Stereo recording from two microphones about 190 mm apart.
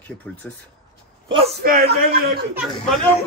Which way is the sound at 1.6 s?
50° right (ahead or behind).